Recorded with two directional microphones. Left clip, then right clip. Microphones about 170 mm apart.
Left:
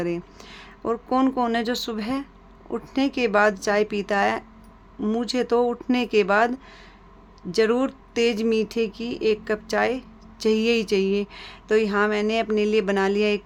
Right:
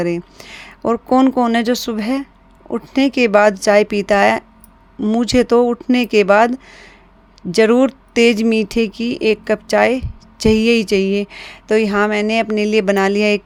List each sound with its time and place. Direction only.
0.0 s speech: 35° right (ahead or behind)
4.9 s speech: 30° right (ahead or behind)
5.2 s speech: 40° right (ahead or behind)